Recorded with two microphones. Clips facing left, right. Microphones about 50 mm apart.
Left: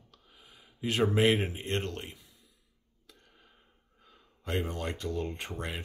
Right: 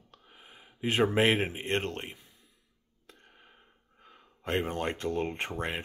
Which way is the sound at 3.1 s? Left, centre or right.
Right.